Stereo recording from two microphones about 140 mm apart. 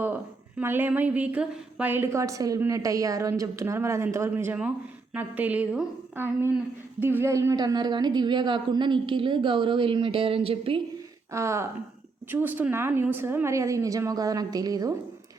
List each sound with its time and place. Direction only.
0.6 s a woman's voice: 15° right (ahead or behind); by 10.8 s 40° right (ahead or behind)
11.3 s a woman's voice: 20° right (ahead or behind)